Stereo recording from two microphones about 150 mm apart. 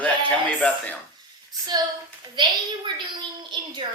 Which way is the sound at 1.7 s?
30° right (ahead or behind).